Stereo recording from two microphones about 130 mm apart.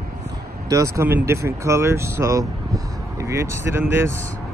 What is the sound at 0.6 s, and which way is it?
Speech, 25° right (ahead or behind).